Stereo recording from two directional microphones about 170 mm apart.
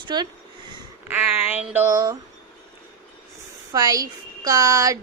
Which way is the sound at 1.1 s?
10° right (ahead or behind).